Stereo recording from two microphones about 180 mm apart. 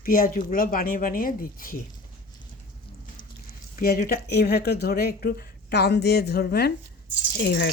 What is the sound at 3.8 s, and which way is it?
Speech, 55° left (ahead or behind).